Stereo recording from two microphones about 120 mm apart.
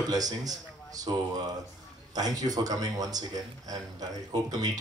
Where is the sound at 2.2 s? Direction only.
30° right (ahead or behind).